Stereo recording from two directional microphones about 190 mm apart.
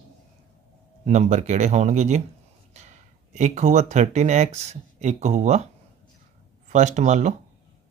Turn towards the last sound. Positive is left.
turn(degrees=-40)  # may be behind; listen again after turning